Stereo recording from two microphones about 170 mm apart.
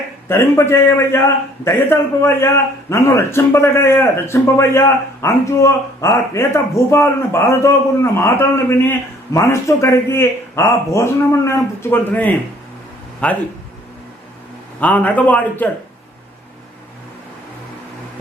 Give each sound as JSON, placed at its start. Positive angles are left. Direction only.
{"t": 0.3, "sound": "speech", "side_deg": 15}
{"t": 14.8, "sound": "speech", "side_deg": 10}